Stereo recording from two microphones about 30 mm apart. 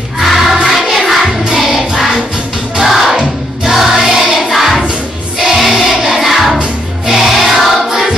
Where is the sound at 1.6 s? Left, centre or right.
Centre.